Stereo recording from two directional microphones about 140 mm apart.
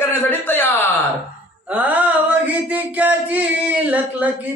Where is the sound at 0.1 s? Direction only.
15° left (ahead or behind).